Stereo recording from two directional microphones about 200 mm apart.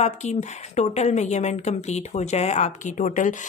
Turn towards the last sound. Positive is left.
turn(degrees=40)  # may be behind; listen again after turning